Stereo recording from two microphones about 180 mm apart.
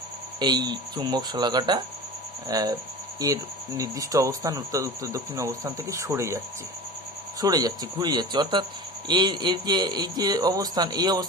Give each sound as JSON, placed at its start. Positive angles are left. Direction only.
{"t": 0.3, "sound": "speech", "side_deg": -25}
{"t": 7.4, "sound": "speech", "side_deg": -20}